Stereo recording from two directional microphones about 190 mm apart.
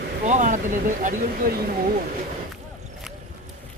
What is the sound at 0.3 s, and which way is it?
Speech, 40° right (ahead or behind).